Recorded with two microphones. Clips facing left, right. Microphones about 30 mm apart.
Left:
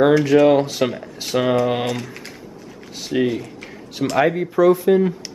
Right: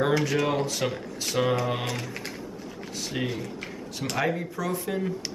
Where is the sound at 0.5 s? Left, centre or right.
Centre.